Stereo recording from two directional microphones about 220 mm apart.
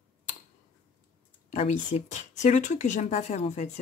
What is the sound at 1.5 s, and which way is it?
Speech, 30° left (ahead or behind).